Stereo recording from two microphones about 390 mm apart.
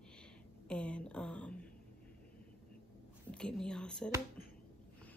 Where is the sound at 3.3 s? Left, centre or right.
Centre.